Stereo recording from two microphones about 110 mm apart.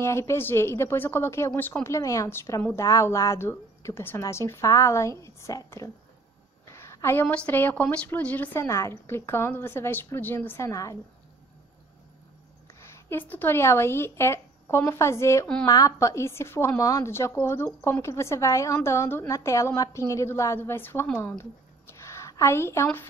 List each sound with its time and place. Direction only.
0.0 s a woman's voice: 25° left (ahead or behind)
8.6 s a woman's voice: 25° left (ahead or behind)
10.7 s a woman's voice: 30° left (ahead or behind)
12.8 s a woman's voice: 15° left (ahead or behind)